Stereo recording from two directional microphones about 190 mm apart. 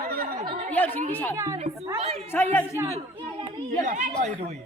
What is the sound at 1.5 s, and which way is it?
Speech, 30° right (ahead or behind).